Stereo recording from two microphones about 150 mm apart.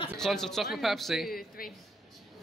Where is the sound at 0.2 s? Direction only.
5° left (ahead or behind).